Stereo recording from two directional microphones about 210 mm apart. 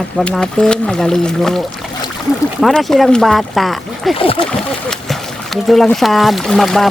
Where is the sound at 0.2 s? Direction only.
5° left (ahead or behind).